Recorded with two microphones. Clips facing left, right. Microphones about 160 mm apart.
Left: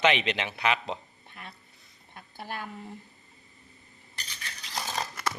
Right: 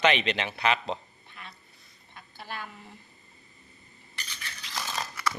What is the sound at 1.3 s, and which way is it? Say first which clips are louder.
Duck: left 1 dB; 50° left (ahead or behind).